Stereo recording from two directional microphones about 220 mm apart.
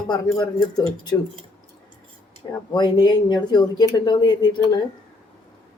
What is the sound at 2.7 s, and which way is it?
Speech, 20° left (ahead or behind).